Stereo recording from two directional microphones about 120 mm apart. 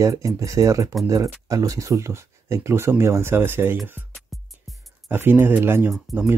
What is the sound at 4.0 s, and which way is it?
Music, 15° right (ahead or behind).